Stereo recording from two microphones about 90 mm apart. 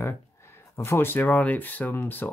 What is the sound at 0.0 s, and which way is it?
Speech, 30° left (ahead or behind).